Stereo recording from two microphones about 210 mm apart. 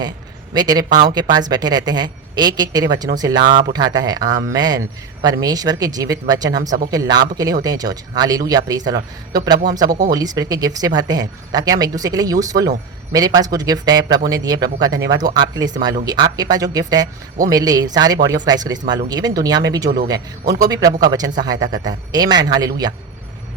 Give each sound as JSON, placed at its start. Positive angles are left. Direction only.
{"t": 0.5, "sound": "speech", "side_deg": -20}